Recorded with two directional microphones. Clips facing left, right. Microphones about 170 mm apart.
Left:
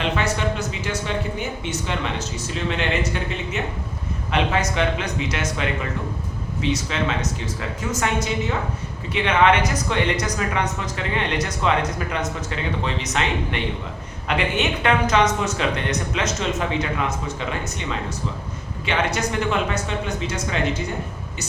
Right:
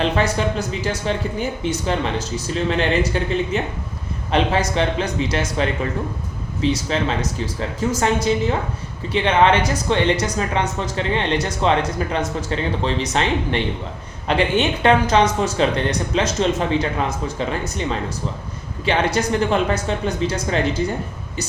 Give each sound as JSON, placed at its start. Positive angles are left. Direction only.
{"t": 0.0, "sound": "speech", "side_deg": -35}
{"t": 2.6, "sound": "speech", "side_deg": -35}